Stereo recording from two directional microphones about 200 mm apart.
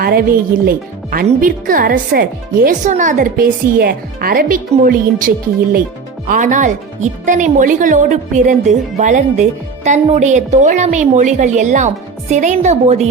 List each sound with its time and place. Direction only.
0.0 s a woman's voice: 50° right (ahead or behind)